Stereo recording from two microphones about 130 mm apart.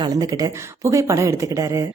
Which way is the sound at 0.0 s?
30° right (ahead or behind).